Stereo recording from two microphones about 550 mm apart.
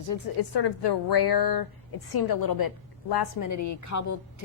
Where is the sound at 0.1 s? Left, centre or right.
Left.